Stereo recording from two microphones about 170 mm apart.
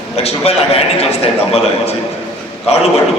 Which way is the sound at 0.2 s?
35° left (ahead or behind).